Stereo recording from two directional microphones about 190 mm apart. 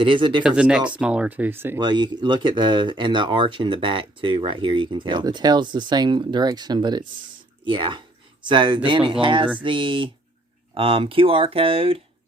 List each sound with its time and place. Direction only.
0.0 s speech: 25° right (ahead or behind)
0.4 s speech: 5° right (ahead or behind)
1.8 s speech: 25° right (ahead or behind)